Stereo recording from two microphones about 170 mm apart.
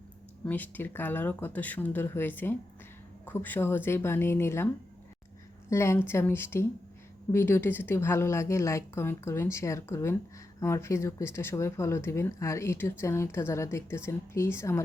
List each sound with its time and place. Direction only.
0.4 s speech: 10° left (ahead or behind)
5.7 s speech: 15° left (ahead or behind)